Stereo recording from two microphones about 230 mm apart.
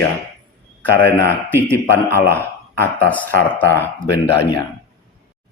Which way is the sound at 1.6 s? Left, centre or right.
Centre.